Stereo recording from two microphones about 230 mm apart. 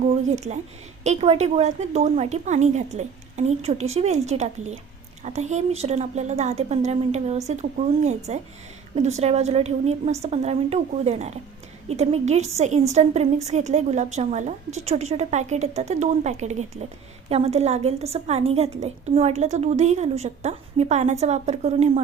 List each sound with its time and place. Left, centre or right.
0.3 s a woman's voice: right